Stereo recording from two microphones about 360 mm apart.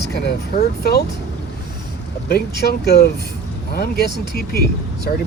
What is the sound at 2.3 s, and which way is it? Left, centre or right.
Speech, left.